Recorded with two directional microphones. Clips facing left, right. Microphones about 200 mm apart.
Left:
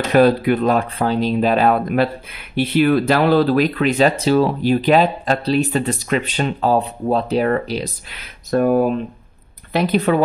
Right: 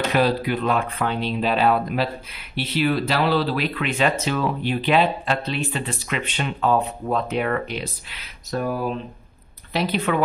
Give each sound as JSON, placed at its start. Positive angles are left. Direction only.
{"t": 0.1, "sound": "speech", "side_deg": 50}